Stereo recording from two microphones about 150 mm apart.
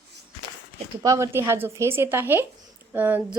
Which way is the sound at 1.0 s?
20° right (ahead or behind).